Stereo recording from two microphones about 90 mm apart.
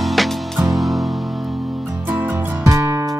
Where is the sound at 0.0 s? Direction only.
Centre (ahead or behind).